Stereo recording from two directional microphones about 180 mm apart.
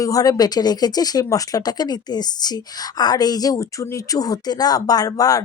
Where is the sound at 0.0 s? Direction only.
20° left (ahead or behind).